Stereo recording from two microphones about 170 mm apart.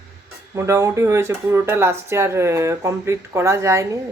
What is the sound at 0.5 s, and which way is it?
Speech, 20° right (ahead or behind).